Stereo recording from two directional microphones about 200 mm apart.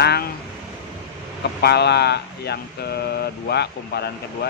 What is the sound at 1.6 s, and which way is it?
Speech, 55° left (ahead or behind).